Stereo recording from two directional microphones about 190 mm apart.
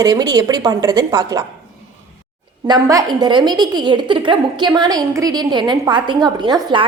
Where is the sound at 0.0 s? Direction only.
20° right (ahead or behind).